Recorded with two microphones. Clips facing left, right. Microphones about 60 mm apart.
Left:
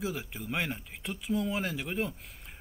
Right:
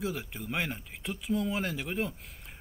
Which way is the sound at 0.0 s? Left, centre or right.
Centre.